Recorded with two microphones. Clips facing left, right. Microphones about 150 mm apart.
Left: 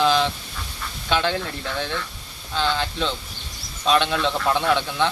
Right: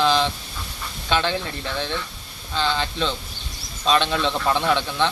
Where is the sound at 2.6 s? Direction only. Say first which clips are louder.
Even; 10° left (ahead or behind).